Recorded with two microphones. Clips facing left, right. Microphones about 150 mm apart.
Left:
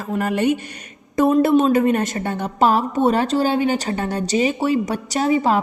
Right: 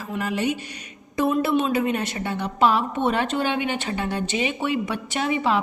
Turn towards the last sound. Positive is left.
turn(degrees=40)  # may be behind; listen again after turning